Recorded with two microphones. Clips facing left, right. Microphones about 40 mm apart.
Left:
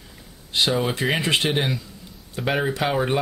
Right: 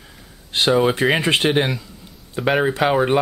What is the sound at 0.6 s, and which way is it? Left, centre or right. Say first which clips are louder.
Speech: right 6 dB; centre.